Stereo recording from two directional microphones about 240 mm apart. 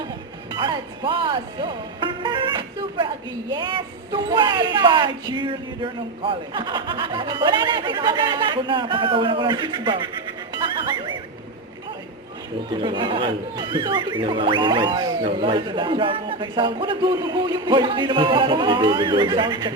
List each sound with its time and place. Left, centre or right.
0.5 s speech: centre
10.5 s music: centre
12.7 s speech: centre